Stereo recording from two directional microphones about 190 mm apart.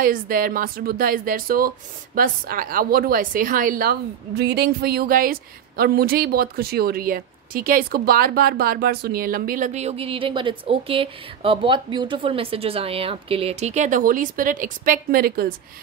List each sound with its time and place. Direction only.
0.0 s a woman's voice: 45° right (ahead or behind)